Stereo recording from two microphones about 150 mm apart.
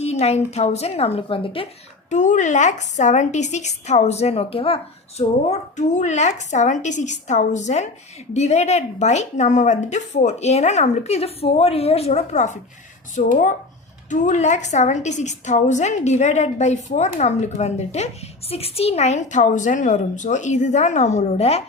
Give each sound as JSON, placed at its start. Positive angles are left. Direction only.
{"t": 0.0, "sound": "a woman's voice", "side_deg": 45}
{"t": 2.0, "sound": "a woman's voice", "side_deg": 55}